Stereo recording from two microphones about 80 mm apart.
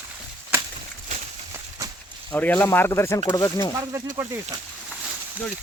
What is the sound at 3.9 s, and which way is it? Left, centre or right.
Speech, right.